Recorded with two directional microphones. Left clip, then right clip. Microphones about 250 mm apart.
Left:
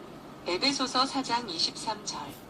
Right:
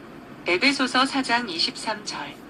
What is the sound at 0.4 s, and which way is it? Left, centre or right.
A woman's voice, right.